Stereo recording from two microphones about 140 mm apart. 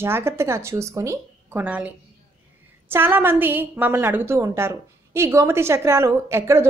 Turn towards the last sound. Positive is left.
turn(degrees=-20)  # may be behind; listen again after turning